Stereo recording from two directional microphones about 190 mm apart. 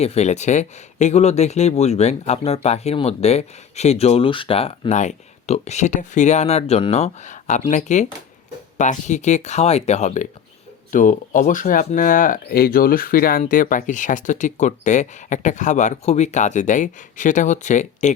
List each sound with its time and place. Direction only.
0.0 s speech: 35° left (ahead or behind)